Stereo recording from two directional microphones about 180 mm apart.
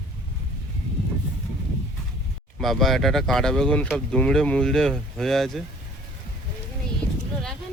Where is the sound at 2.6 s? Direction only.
Centre (ahead or behind).